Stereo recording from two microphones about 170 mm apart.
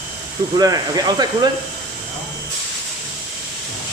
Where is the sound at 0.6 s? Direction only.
20° right (ahead or behind).